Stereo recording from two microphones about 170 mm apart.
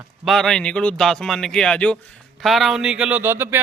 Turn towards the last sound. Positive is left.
turn(degrees=-15)  # may be behind; listen again after turning